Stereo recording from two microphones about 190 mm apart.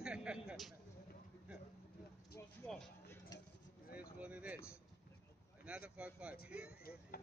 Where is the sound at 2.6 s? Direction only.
5° left (ahead or behind).